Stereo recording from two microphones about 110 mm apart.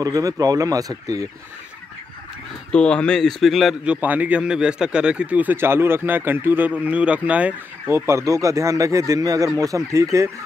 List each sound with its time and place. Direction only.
0.0 s speech: 30° right (ahead or behind)
2.7 s speech: 10° left (ahead or behind); by 7.9 s 10° right (ahead or behind)
8.1 s speech: 30° right (ahead or behind)